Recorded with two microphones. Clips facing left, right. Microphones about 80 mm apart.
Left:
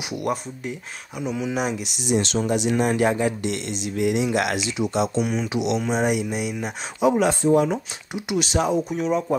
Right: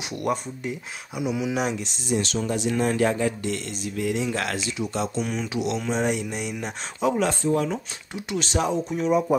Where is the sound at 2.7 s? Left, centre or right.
Centre.